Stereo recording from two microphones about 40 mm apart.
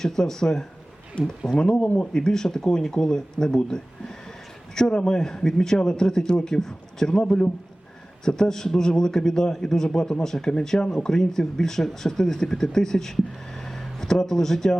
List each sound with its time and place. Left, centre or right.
0.0 s speech: centre
7.2 s speech: left
13.5 s a sound: centre